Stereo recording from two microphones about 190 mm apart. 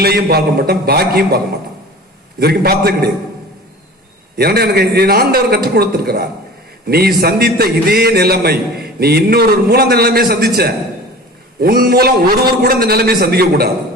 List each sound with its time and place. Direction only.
0.0 s a man's voice: 55° right (ahead or behind)
2.4 s a man's voice: 55° right (ahead or behind)
4.4 s a man's voice: 55° right (ahead or behind)